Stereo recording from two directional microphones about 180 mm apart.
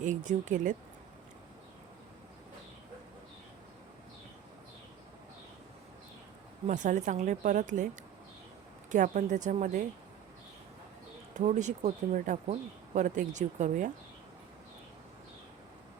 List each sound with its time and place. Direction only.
0.0 s speech: 45° right (ahead or behind)
6.7 s speech: 45° right (ahead or behind)
8.9 s speech: 45° right (ahead or behind)
11.3 s speech: 40° right (ahead or behind)